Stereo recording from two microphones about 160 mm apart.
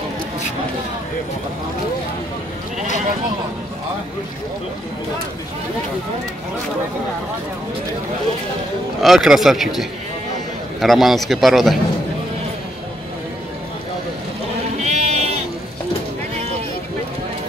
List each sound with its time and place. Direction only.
9.0 s a man's voice: centre (ahead or behind)
14.8 s sheep: 45° right (ahead or behind)